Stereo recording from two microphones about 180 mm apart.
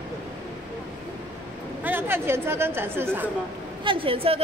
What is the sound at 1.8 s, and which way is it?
Speech, 10° right (ahead or behind).